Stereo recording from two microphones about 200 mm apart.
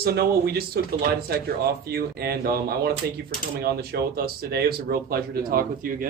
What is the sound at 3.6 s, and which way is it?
Speech, 50° right (ahead or behind).